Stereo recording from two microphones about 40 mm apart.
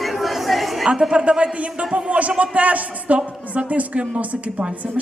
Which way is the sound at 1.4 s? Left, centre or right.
Right.